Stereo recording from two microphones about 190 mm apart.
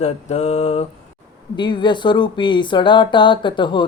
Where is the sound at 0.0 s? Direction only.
35° left (ahead or behind).